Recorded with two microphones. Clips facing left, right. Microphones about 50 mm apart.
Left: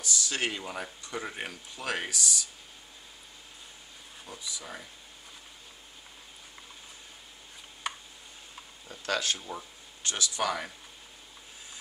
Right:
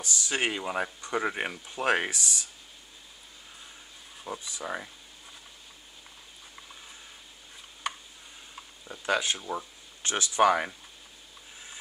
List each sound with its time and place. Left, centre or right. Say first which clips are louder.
0.0 s speech: right 2 dB; right
4.3 s speech: right 7 dB; right
7.8 s a sound: right 2 dB; centre
8.8 s speech: right 3 dB; centre